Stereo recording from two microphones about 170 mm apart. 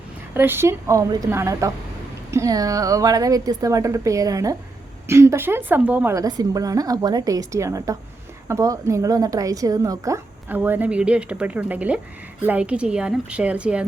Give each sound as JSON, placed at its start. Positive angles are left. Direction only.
{"t": 0.3, "sound": "a woman's voice", "side_deg": -15}